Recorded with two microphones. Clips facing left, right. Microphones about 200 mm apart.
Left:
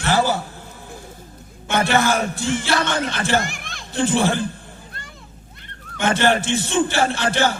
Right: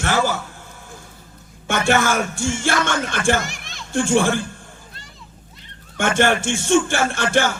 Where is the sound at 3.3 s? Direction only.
55° left (ahead or behind).